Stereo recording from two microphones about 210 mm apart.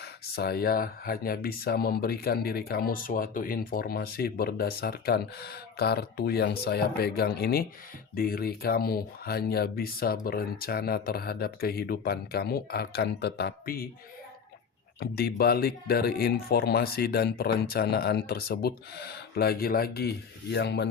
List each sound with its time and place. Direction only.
0.0 s speech: 50° left (ahead or behind)
15.0 s speech: 45° left (ahead or behind)